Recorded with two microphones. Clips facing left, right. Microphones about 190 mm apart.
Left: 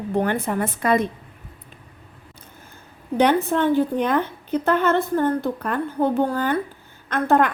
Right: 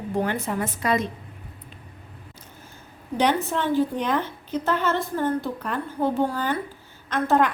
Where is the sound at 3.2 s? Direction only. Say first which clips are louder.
Left 5 dB; 55° left (ahead or behind).